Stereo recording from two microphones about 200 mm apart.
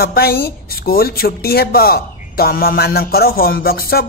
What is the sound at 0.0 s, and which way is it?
Speech, 50° left (ahead or behind).